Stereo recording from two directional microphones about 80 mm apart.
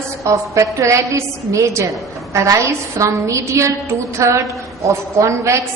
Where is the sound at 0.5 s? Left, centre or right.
Right.